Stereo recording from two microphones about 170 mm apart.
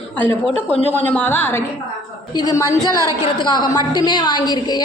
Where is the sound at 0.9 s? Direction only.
10° left (ahead or behind).